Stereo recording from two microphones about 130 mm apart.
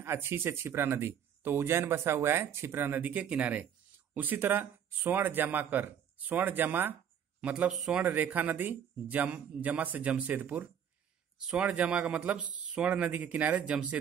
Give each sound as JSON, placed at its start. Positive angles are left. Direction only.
{"t": 0.0, "sound": "speech", "side_deg": -20}